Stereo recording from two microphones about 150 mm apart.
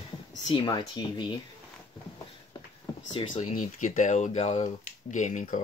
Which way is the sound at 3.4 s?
55° left (ahead or behind).